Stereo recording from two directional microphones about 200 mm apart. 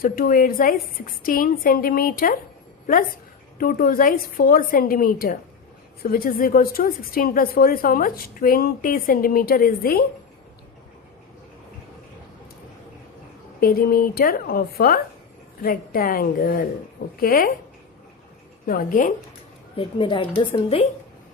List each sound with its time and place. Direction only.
0.0 s a woman's voice: 45° left (ahead or behind)
3.6 s a woman's voice: 45° left (ahead or behind)
13.6 s a woman's voice: 45° left (ahead or behind)
18.6 s a woman's voice: 45° left (ahead or behind)
19.7 s a woman's voice: 25° left (ahead or behind)